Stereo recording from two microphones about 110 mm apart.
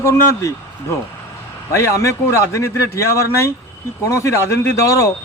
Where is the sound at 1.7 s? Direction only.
25° left (ahead or behind).